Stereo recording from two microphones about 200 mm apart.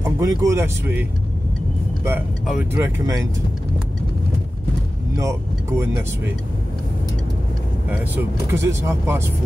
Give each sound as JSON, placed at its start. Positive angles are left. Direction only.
{"t": 0.2, "sound": "speech", "side_deg": -15}
{"t": 2.0, "sound": "speech", "side_deg": -5}
{"t": 5.1, "sound": "speech", "side_deg": -15}
{"t": 7.9, "sound": "speech", "side_deg": -10}